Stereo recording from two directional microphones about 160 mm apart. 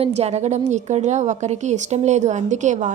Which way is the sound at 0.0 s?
40° right (ahead or behind).